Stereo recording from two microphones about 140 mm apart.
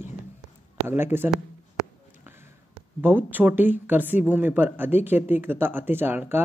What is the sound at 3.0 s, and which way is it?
A woman's voice, 15° right (ahead or behind).